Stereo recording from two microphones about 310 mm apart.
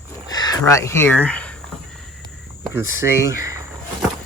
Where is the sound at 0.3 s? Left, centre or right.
Centre.